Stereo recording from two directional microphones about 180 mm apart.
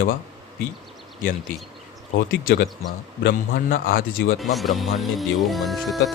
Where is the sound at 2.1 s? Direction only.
55° left (ahead or behind).